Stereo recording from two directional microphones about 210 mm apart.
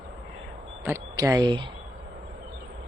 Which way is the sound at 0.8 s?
15° right (ahead or behind).